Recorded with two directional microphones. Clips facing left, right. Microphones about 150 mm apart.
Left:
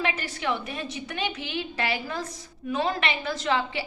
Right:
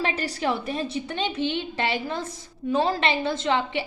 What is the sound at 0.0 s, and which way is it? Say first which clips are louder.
A woman's voice: right 3 dB; 35° right (ahead or behind).